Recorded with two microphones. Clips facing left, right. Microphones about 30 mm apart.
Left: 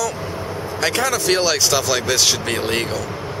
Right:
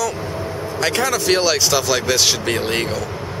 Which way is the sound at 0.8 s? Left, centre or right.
Centre.